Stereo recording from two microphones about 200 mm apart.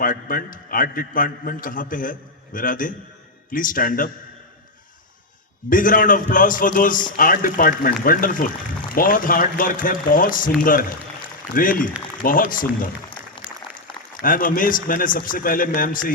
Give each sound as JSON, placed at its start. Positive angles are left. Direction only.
{"t": 0.0, "sound": "a man's voice", "side_deg": 45}
{"t": 5.6, "sound": "a man's voice", "side_deg": 45}
{"t": 14.2, "sound": "a man's voice", "side_deg": 45}